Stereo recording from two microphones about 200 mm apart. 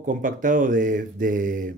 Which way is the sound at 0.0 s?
40° right (ahead or behind).